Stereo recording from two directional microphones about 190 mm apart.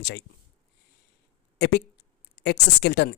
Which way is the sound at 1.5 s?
60° left (ahead or behind).